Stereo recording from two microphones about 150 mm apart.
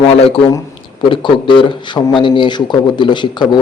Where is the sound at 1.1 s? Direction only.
35° left (ahead or behind).